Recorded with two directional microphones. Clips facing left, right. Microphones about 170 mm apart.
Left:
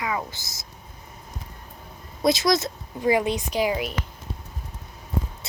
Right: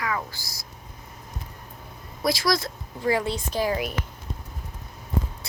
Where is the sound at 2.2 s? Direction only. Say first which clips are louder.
Left 3 dB; 20° left (ahead or behind).